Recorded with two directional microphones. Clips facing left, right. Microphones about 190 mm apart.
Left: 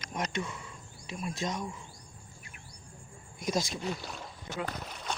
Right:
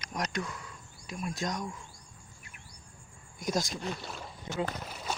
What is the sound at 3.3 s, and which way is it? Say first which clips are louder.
Speech: even; centre (ahead or behind).